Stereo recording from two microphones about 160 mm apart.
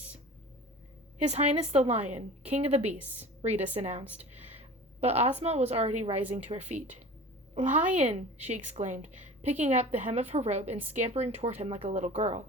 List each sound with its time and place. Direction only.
1.2 s a woman's voice: 40° right (ahead or behind)
4.1 s a sound: 40° right (ahead or behind)
4.9 s a woman's voice: 40° right (ahead or behind)
7.9 s a woman's voice: 40° right (ahead or behind)